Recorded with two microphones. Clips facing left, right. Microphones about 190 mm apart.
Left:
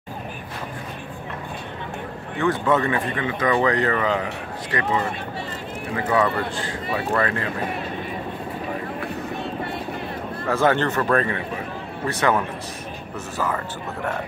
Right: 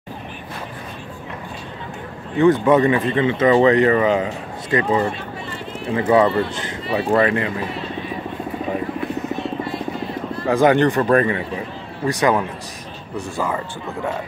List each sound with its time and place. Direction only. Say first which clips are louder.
2.3 s speech: right 7 dB; 20° right (ahead or behind)
10.5 s speech: right 5 dB; 15° right (ahead or behind)